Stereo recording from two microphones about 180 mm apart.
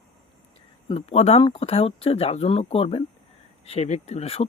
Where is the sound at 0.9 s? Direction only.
35° left (ahead or behind).